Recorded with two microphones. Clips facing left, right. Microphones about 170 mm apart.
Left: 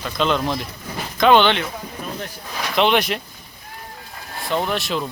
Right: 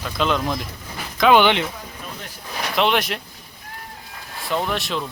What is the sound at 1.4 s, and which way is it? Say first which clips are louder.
Speech: right 1 dB; 15° right (ahead or behind).